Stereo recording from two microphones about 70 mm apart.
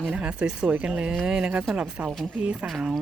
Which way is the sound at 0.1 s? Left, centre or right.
Centre.